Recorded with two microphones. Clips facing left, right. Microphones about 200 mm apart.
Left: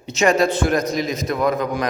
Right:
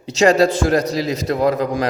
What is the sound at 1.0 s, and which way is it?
Speech, 30° right (ahead or behind).